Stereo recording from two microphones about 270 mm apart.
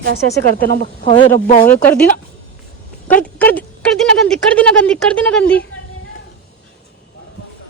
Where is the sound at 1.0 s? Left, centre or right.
Left.